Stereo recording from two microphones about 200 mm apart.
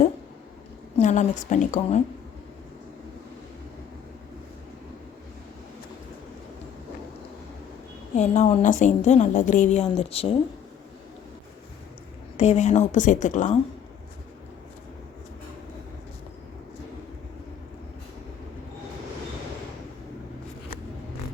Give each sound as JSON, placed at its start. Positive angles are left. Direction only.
{"t": 0.9, "sound": "a woman's voice", "side_deg": 35}
{"t": 8.1, "sound": "a woman's voice", "side_deg": 35}
{"t": 12.4, "sound": "a woman's voice", "side_deg": 35}